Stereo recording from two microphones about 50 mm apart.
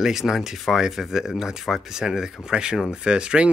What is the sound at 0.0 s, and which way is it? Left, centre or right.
Speech, centre.